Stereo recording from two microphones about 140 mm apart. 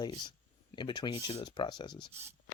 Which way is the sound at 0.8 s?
30° left (ahead or behind).